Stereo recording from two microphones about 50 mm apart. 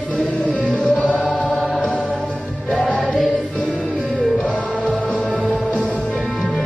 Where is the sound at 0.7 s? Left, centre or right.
Centre.